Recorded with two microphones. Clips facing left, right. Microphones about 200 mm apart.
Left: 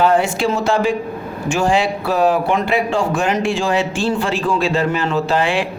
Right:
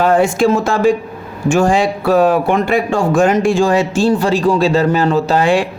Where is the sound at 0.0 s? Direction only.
45° right (ahead or behind).